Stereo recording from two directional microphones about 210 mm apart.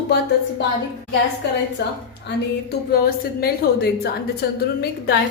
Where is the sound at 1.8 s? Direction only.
55° left (ahead or behind).